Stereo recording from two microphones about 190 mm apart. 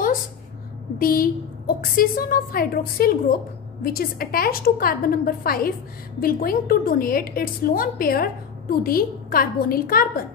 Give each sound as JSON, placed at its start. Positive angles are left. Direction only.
{"t": 0.9, "sound": "a woman's voice", "side_deg": 50}